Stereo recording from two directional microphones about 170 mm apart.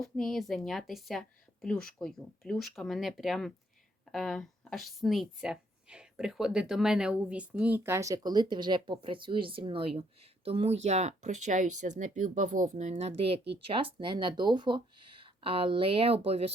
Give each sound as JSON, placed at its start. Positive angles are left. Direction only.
{"t": 0.0, "sound": "speech", "side_deg": 5}